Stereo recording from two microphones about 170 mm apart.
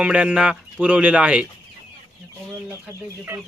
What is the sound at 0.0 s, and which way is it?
Speech, 5° right (ahead or behind).